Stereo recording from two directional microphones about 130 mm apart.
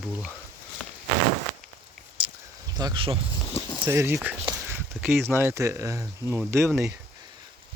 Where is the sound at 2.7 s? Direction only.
35° right (ahead or behind).